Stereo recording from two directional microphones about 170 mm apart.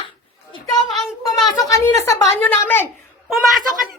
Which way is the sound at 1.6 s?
20° left (ahead or behind).